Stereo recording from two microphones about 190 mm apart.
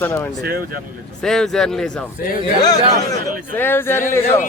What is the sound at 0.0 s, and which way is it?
Speech, 10° left (ahead or behind).